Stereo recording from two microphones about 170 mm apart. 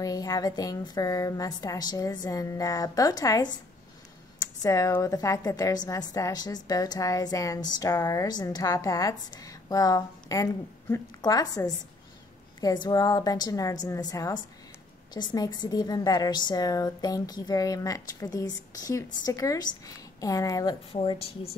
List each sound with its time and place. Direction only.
0.0 s a woman's voice: 20° left (ahead or behind)
4.6 s a woman's voice: 20° left (ahead or behind)
20.9 s speech: 35° left (ahead or behind)